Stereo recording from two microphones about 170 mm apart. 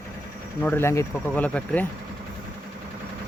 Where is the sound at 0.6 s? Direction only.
10° left (ahead or behind).